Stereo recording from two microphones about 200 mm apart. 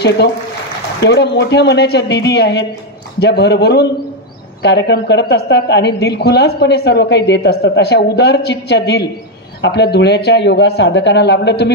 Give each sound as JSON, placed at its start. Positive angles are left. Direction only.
{"t": 1.0, "sound": "a woman's voice", "side_deg": 60}